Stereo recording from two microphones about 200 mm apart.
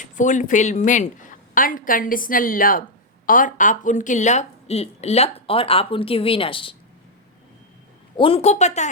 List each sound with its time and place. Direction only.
0.0 s a woman's voice: 40° left (ahead or behind)
8.1 s a woman's voice: 25° left (ahead or behind)